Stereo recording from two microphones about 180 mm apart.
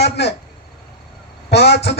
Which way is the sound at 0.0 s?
65° left (ahead or behind).